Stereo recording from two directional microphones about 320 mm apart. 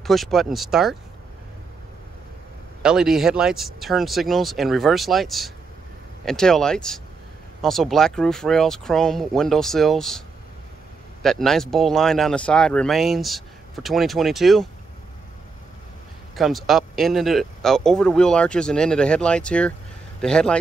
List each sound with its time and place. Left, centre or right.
0.0 s speech: centre
2.8 s speech: centre
11.2 s speech: centre
16.3 s a man's voice: centre